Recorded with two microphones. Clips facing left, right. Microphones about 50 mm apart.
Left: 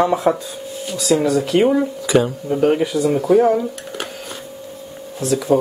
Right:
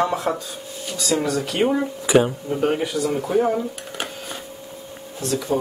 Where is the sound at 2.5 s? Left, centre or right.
Centre.